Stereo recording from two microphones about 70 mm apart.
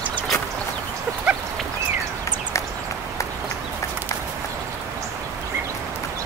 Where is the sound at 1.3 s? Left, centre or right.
Centre.